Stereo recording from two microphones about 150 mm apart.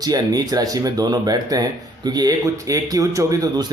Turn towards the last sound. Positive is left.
turn(degrees=-25)  # may be behind; listen again after turning